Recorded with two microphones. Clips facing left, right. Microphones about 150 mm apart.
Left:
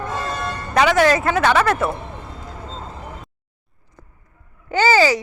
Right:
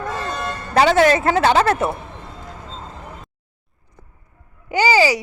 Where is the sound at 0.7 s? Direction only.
30° right (ahead or behind).